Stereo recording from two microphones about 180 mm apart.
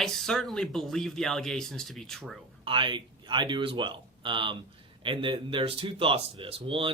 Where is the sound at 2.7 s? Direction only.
25° right (ahead or behind).